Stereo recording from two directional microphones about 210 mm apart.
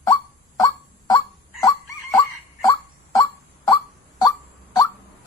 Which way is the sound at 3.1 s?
20° left (ahead or behind).